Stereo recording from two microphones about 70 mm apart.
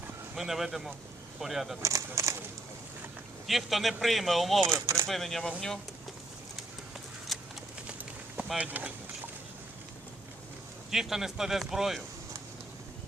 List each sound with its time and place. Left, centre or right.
0.3 s a man's voice: centre
1.8 s speech: right
3.4 s a man's voice: centre
4.6 s speech: right
5.0 s a man's voice: centre
7.3 s a sound: centre
8.5 s speech: right
10.9 s a man's voice: centre